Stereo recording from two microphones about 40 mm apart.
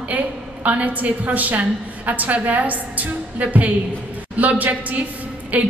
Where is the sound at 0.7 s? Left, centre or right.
Right.